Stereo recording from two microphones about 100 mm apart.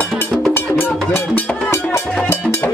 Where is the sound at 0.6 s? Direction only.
20° left (ahead or behind).